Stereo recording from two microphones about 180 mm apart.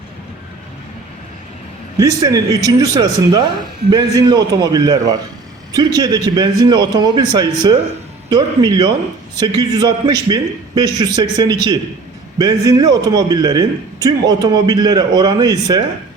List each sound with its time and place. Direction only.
2.0 s speech: 20° right (ahead or behind)